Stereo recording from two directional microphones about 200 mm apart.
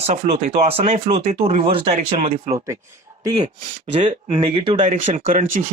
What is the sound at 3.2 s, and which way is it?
Speech, 20° right (ahead or behind).